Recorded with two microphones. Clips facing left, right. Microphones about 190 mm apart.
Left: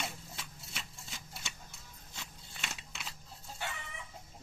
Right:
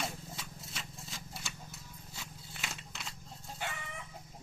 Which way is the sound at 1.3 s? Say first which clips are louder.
Right 1 dB; centre (ahead or behind).